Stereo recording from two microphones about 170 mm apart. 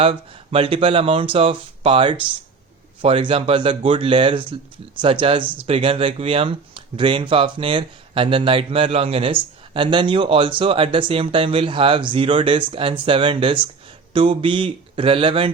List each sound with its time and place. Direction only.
0.0 s speech: 35° right (ahead or behind)